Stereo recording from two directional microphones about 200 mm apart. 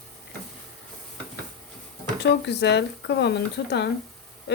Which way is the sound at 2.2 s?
60° left (ahead or behind).